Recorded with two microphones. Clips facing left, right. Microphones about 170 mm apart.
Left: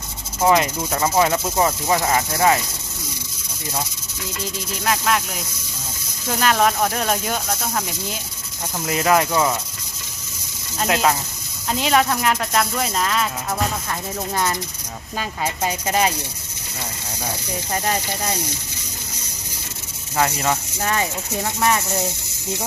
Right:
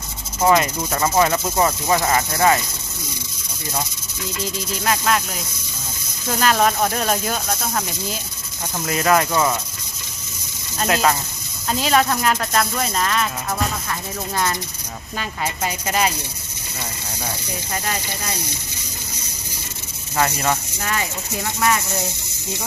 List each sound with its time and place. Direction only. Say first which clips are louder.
0.4 s speech: even; 10° left (ahead or behind)
4.9 s speech: even; 5° left (ahead or behind)
6.2 s speech: even; 5° left (ahead or behind)
8.9 s speech: even; 10° left (ahead or behind)
10.8 s speech: even; 10° left (ahead or behind)
15.2 s speech: left 1 dB; 30° left (ahead or behind)
17.7 s speech: left 4 dB; 35° left (ahead or behind)
20.1 s speech: even; 15° left (ahead or behind)
20.8 s speech: left 3 dB; 30° left (ahead or behind)